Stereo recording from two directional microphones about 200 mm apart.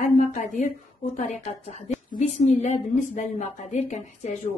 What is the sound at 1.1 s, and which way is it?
A woman's voice, 35° left (ahead or behind).